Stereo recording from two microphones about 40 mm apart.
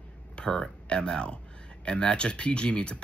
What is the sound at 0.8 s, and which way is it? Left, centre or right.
Speech, left.